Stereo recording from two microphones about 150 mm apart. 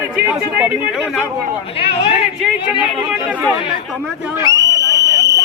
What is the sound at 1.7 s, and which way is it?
Speech, 40° left (ahead or behind).